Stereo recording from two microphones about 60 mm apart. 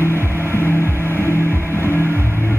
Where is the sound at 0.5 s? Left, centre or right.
Left.